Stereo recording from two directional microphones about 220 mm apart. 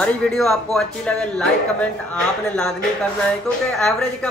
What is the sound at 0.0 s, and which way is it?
A woman's voice, 5° left (ahead or behind).